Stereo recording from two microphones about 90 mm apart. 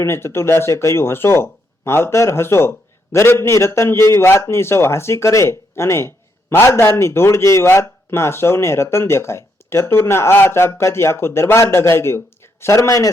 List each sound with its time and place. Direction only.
0.0 s speech: 30° left (ahead or behind)